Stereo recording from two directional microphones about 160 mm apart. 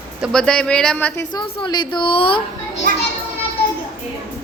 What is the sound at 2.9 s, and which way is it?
Children playing, 55° right (ahead or behind).